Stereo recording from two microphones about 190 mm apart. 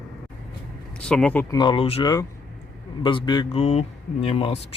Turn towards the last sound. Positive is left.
turn(degrees=30)  # may be behind; listen again after turning